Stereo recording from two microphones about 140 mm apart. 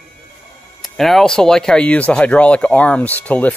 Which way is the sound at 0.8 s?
Centre (ahead or behind).